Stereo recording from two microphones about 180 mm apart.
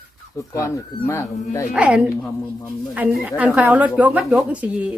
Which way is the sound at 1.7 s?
5° right (ahead or behind).